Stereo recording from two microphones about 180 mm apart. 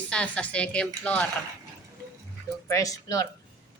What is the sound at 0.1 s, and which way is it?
A woman's voice, 5° left (ahead or behind).